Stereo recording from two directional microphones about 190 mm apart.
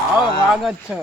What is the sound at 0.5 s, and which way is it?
Speech, 5° right (ahead or behind).